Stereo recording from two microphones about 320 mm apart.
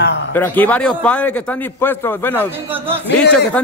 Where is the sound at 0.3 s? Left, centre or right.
Centre.